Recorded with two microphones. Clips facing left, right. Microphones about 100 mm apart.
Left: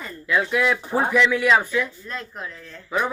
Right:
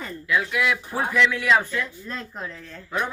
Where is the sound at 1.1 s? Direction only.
10° left (ahead or behind).